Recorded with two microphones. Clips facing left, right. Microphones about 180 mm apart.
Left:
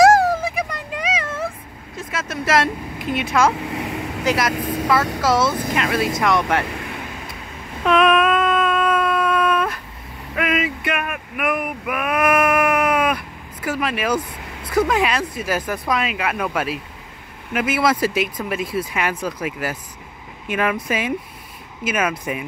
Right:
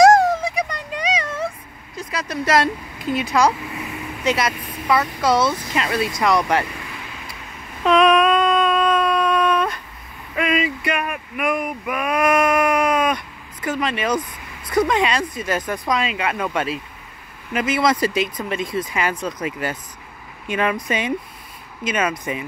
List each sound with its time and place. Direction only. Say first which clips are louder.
0.0 s a sound: right 1 dB; 5° left (ahead or behind)
2.0 s vehicle: right 1 dB; centre (ahead or behind)
3.2 s speech: even; centre (ahead or behind)
3.7 s vehicle: left 5 dB; 75° left (ahead or behind)
4.2 s speech: even; centre (ahead or behind)
4.6 s vehicle: left 10 dB; 90° left
5.2 s speech: even; centre (ahead or behind)
7.8 s a sound: right 1 dB; 5° left (ahead or behind)
14.7 s speech: even; 5° left (ahead or behind)